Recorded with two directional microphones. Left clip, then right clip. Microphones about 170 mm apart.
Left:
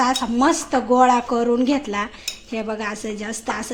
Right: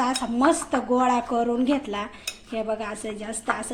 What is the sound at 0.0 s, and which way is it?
A woman's voice, 10° left (ahead or behind).